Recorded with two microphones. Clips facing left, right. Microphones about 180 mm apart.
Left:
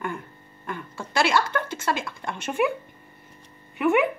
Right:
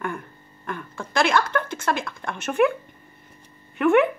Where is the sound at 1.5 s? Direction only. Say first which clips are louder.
Right 2 dB; 55° right (ahead or behind).